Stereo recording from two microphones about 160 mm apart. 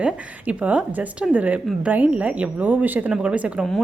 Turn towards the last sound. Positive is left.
turn(degrees=-10)  # may be behind; listen again after turning